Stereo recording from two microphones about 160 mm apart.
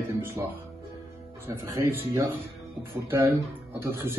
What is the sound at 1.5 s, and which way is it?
Speech, 20° right (ahead or behind).